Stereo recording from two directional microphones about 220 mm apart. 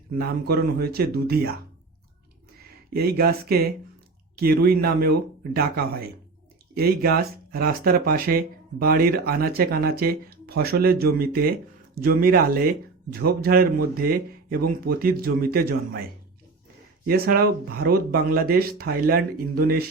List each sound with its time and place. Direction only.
0.2 s speech: 45° right (ahead or behind)
2.9 s speech: 45° right (ahead or behind)
17.1 s speech: 45° right (ahead or behind)